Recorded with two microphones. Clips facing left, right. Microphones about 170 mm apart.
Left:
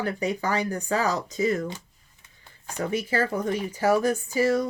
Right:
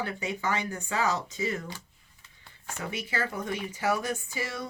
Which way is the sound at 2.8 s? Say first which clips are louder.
Left 8 dB; 40° left (ahead or behind).